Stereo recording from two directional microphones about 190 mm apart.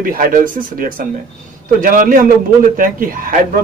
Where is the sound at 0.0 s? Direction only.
50° right (ahead or behind).